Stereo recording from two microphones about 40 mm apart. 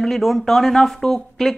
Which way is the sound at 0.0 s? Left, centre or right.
Centre.